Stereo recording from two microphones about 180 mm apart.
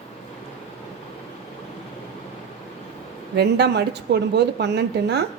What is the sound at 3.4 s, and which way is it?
Speech, 65° right (ahead or behind).